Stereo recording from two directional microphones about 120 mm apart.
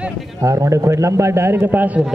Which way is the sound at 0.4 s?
25° right (ahead or behind).